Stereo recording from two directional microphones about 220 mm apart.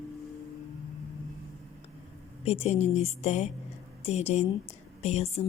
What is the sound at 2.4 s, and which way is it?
A woman's voice, 30° left (ahead or behind).